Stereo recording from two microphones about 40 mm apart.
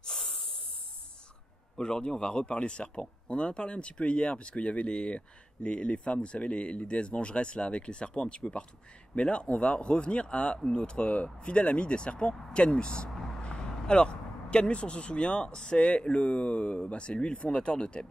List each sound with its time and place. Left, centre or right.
0.0 s snort: centre
1.8 s speech: left